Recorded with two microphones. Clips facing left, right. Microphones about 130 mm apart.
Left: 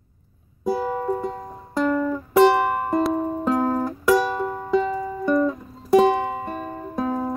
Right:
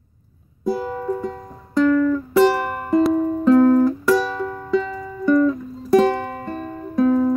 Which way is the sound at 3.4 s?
15° left (ahead or behind).